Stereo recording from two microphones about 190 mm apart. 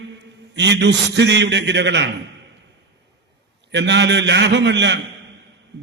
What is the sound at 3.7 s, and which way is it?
A man's voice, 65° right (ahead or behind).